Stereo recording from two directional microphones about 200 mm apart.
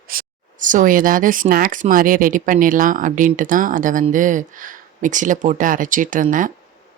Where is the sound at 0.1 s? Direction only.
45° right (ahead or behind).